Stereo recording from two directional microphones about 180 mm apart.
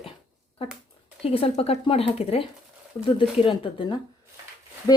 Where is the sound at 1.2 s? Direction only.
30° left (ahead or behind).